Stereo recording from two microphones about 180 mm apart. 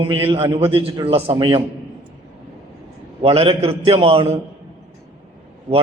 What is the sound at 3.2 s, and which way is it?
A man's voice, 30° right (ahead or behind).